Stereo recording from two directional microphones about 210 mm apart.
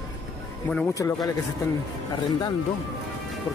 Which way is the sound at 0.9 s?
15° left (ahead or behind).